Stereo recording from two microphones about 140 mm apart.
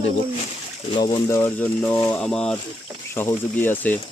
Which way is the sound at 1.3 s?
15° left (ahead or behind).